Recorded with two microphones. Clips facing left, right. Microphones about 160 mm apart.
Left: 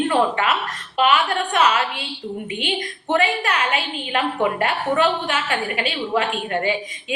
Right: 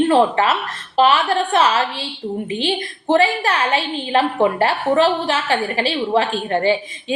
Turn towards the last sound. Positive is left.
turn(degrees=-30)  # may be behind; listen again after turning